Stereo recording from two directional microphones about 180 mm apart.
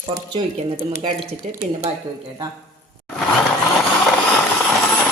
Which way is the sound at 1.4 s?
40° right (ahead or behind).